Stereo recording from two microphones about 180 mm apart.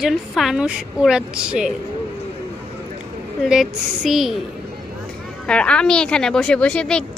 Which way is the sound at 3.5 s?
Centre (ahead or behind).